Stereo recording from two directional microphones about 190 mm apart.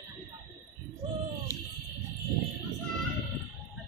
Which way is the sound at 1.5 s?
15° left (ahead or behind).